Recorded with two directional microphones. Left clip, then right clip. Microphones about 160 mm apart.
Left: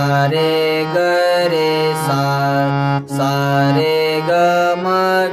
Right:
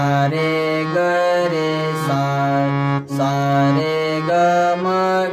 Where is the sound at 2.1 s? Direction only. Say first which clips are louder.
Left 2 dB; 30° left (ahead or behind).